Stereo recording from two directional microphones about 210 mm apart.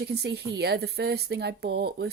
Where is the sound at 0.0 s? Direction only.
50° right (ahead or behind).